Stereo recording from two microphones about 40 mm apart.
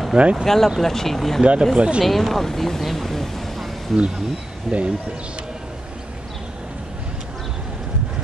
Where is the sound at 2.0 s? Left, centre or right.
Centre.